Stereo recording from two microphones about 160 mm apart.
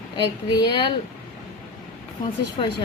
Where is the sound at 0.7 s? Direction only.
30° left (ahead or behind).